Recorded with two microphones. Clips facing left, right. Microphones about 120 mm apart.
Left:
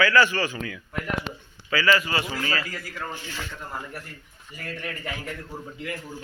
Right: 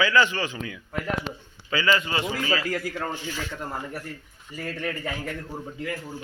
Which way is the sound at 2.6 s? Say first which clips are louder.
Right 8 dB; 55° right (ahead or behind).